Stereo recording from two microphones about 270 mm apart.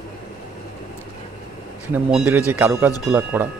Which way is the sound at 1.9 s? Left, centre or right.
Centre.